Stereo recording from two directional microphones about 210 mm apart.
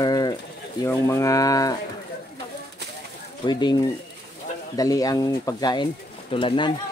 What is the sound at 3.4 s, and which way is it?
Speech, 20° left (ahead or behind).